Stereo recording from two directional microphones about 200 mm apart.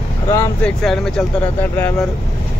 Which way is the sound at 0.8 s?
Centre (ahead or behind).